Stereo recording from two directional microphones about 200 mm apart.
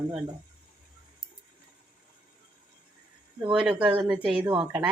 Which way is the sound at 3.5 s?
5° right (ahead or behind).